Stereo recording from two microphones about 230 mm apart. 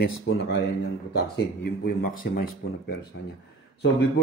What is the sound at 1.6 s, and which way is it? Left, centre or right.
Speech, left.